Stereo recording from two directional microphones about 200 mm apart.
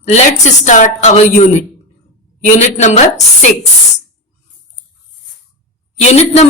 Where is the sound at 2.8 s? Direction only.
35° left (ahead or behind).